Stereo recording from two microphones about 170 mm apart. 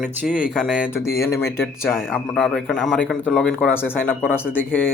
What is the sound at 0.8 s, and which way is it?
Speech, 15° left (ahead or behind).